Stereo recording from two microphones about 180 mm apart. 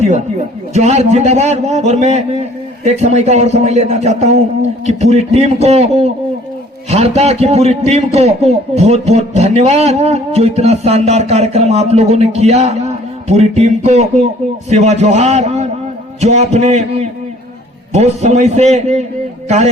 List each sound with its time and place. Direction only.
0.7 s a man's voice: 40° right (ahead or behind)